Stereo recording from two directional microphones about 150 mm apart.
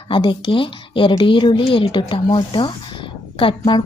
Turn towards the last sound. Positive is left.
turn(degrees=35)  # may be behind; listen again after turning